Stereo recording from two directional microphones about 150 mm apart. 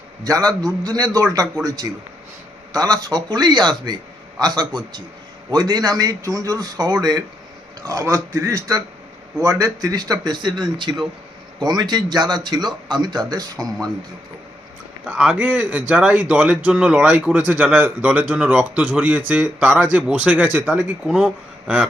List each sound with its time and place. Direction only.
0.3 s a man's voice: 25° right (ahead or behind)
15.0 s a man's voice: 10° right (ahead or behind)